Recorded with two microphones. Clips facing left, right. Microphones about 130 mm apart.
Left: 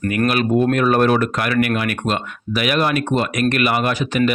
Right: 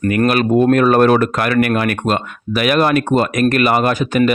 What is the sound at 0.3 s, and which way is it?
Speech, 45° right (ahead or behind).